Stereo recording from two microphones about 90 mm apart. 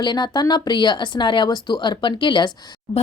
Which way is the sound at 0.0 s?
55° left (ahead or behind).